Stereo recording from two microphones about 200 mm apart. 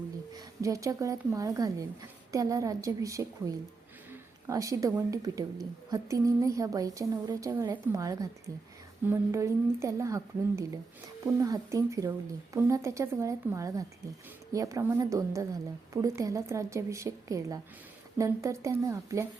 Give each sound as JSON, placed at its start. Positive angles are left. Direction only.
{"t": 0.3, "sound": "a woman's voice", "side_deg": -15}